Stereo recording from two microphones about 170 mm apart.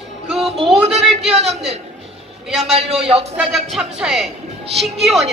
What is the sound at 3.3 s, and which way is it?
A man's voice, 5° right (ahead or behind).